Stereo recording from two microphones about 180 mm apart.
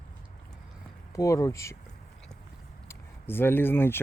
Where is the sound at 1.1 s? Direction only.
15° left (ahead or behind).